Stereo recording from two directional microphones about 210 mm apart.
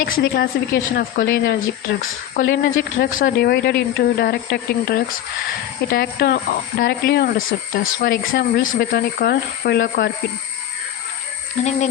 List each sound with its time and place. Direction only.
0.0 s speech: 50° left (ahead or behind)
11.6 s speech: 35° left (ahead or behind)